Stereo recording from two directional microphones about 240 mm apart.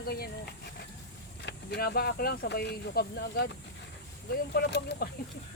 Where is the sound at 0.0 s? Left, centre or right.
Left.